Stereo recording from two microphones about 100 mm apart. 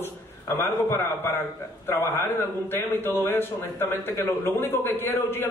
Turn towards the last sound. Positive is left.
turn(degrees=20)  # may be behind; listen again after turning